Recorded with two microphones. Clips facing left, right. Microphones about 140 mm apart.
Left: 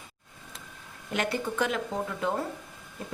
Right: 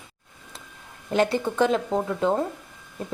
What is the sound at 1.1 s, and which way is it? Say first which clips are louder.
Speech: right 7 dB; 30° right (ahead or behind).